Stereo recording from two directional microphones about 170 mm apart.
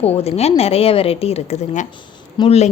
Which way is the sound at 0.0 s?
35° left (ahead or behind).